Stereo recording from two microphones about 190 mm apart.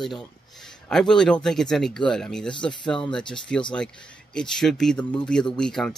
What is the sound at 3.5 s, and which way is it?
Speech, 5° left (ahead or behind).